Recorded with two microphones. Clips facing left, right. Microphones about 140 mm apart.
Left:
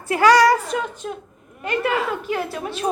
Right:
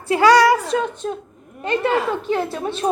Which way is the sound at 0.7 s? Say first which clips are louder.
Right 4 dB; 35° right (ahead or behind).